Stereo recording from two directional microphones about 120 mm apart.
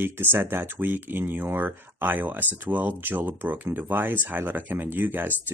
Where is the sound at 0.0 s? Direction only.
15° right (ahead or behind).